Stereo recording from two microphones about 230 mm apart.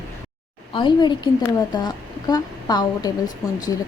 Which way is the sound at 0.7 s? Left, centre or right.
Centre.